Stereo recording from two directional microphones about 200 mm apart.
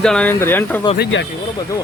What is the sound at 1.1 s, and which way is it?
Speech, 65° left (ahead or behind).